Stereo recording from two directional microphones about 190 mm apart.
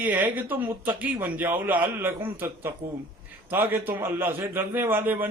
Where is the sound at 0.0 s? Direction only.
10° right (ahead or behind).